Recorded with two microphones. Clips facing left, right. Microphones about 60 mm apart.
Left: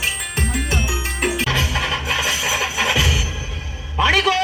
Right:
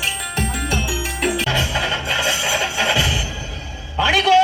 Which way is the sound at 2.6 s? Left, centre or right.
Left.